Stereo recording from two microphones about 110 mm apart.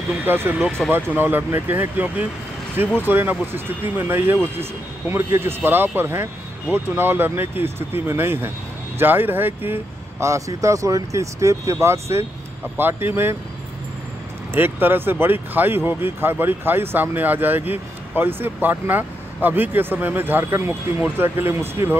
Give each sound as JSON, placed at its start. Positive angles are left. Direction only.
{"t": 0.2, "sound": "speech", "side_deg": -20}
{"t": 0.6, "sound": "speech", "side_deg": 5}
{"t": 0.9, "sound": "speech", "side_deg": -20}
{"t": 14.5, "sound": "speech", "side_deg": -20}